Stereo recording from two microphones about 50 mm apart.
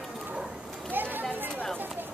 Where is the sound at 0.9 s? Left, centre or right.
Right.